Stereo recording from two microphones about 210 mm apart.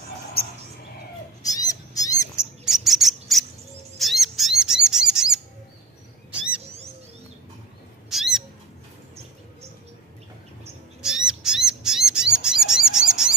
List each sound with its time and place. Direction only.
1.4 s owl: 15° left (ahead or behind)
2.3 s bird: centre (ahead or behind)
8.1 s bird: centre (ahead or behind)
11.0 s owl: 5° right (ahead or behind)
12.1 s bird: 5° right (ahead or behind)